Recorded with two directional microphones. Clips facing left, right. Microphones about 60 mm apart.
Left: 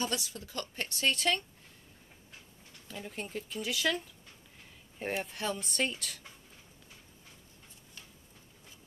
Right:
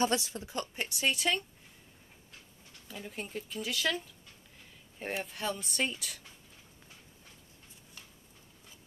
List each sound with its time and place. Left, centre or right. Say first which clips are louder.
0.0 s a woman's voice: right 5 dB; right
0.8 s speech: left 1 dB; centre
2.9 s speech: left 1 dB; centre